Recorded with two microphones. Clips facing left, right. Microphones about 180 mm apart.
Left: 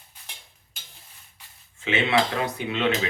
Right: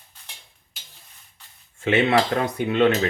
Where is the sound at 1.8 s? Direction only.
45° right (ahead or behind).